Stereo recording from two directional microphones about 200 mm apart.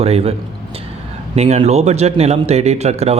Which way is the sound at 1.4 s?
35° right (ahead or behind).